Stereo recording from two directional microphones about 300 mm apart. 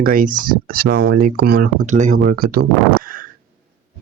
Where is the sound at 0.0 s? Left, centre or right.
Right.